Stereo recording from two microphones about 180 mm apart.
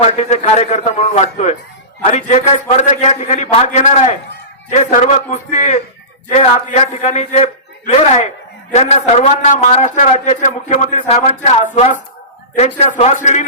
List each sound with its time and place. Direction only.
0.0 s a man's voice: 40° left (ahead or behind)